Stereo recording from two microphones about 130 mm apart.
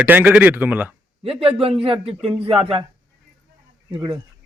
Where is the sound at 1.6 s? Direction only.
45° right (ahead or behind).